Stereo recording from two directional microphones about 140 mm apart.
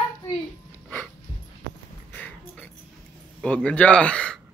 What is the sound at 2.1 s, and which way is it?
Music, 10° left (ahead or behind).